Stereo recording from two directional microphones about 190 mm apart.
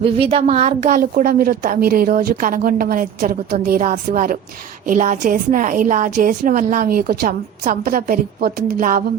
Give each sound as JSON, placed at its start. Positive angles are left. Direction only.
{"t": 0.0, "sound": "a woman's voice", "side_deg": -30}